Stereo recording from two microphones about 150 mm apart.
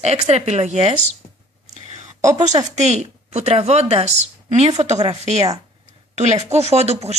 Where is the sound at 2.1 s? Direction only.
20° right (ahead or behind).